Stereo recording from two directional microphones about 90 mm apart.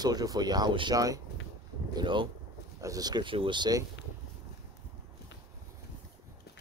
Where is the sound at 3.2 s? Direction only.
70° right (ahead or behind).